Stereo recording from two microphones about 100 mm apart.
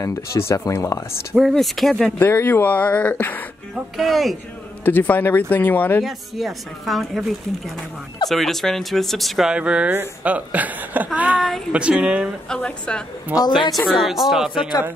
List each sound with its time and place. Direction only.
0.0 s speech: 30° left (ahead or behind)
1.3 s speech: centre (ahead or behind)
2.1 s speech: 20° left (ahead or behind)
3.9 s speech: centre (ahead or behind)
4.8 s speech: 20° left (ahead or behind)
6.0 s speech: centre (ahead or behind)
9.6 s speech: 10° right (ahead or behind)
12.4 s speech: 5° left (ahead or behind)
13.6 s a woman's voice: 40° left (ahead or behind)
14.0 s speech: centre (ahead or behind)